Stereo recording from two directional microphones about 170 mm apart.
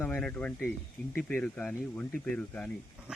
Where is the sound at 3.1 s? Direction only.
5° right (ahead or behind).